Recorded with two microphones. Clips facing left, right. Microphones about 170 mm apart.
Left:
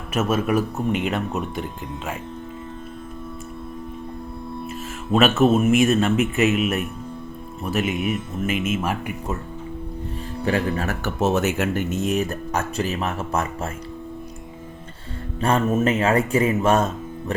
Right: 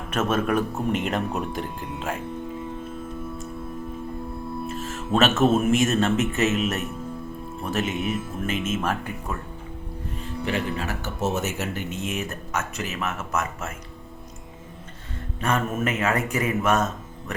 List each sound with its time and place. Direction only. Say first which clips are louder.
0.1 s speech: left 2 dB; 5° left (ahead or behind)
4.6 s speech: right 1 dB; 10° left (ahead or behind)
10.4 s speech: left 5 dB; 45° left (ahead or behind)
11.0 s speech: left 7 dB; 70° left (ahead or behind); by 13.7 s 30° left (ahead or behind)
15.4 s speech: left 5 dB; 30° left (ahead or behind)